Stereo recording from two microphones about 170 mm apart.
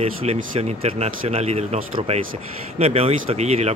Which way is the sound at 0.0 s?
35° right (ahead or behind).